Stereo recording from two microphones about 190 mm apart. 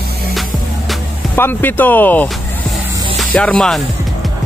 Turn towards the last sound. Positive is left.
turn(degrees=5)  # may be behind; listen again after turning